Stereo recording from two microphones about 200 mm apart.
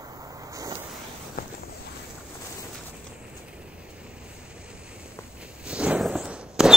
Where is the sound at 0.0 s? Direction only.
20° right (ahead or behind).